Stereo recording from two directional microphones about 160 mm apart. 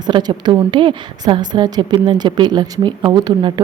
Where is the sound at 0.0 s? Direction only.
25° right (ahead or behind).